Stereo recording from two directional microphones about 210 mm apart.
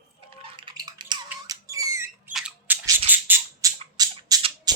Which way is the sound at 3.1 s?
10° right (ahead or behind).